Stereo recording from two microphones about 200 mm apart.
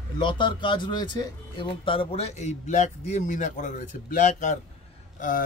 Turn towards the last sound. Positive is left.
turn(degrees=40)  # may be behind; listen again after turning